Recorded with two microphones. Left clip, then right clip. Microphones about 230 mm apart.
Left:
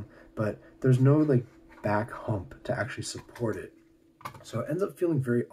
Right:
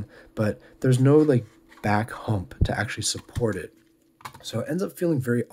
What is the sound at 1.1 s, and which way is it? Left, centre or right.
Speech, right.